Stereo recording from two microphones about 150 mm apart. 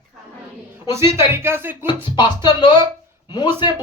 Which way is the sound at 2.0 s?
30° left (ahead or behind).